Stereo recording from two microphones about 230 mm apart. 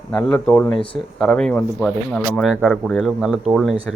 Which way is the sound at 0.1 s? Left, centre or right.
Centre.